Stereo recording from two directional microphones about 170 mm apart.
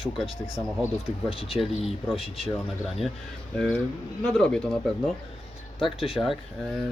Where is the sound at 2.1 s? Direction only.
Centre (ahead or behind).